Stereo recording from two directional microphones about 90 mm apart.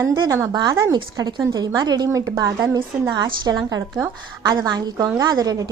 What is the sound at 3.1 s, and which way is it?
A woman's voice, 50° right (ahead or behind).